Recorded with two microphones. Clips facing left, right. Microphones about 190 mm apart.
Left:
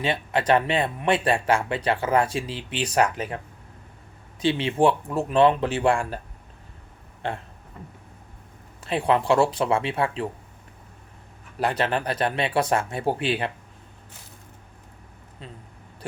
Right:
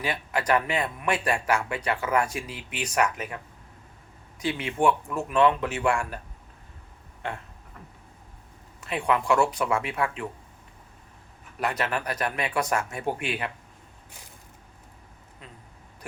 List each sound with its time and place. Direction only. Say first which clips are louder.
0.0 s speech: left 4 dB; 25° left (ahead or behind)
7.2 s speech: left 4 dB; 30° left (ahead or behind)
8.8 s speech: left 4 dB; 30° left (ahead or behind)
11.6 s speech: left 4 dB; 30° left (ahead or behind)